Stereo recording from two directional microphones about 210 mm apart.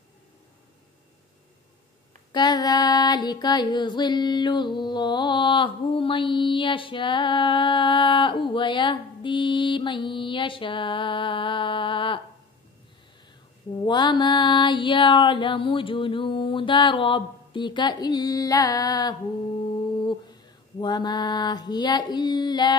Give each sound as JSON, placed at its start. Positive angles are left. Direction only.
{"t": 2.3, "sound": "child singing", "side_deg": 20}
{"t": 13.8, "sound": "child singing", "side_deg": 20}
{"t": 20.8, "sound": "child singing", "side_deg": 20}